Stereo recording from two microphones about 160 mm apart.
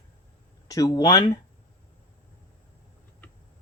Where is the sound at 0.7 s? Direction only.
25° left (ahead or behind).